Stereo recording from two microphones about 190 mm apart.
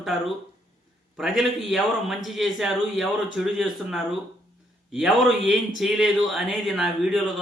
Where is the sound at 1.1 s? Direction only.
Centre (ahead or behind).